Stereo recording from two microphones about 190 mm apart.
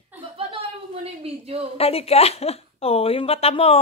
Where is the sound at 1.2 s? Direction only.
30° right (ahead or behind).